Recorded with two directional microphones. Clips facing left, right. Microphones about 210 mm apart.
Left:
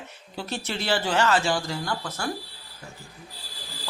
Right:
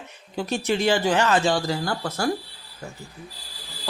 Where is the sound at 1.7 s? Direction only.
40° right (ahead or behind).